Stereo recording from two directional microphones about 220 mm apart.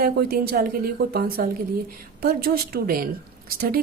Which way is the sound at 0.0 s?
45° right (ahead or behind).